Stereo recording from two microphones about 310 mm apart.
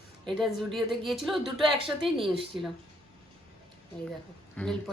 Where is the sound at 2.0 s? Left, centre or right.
Centre.